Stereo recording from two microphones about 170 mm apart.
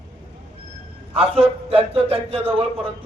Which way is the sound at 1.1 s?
35° right (ahead or behind).